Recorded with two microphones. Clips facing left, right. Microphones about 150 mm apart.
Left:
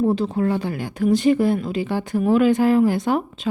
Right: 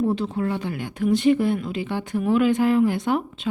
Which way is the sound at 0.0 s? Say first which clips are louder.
Left 3 dB; 35° left (ahead or behind).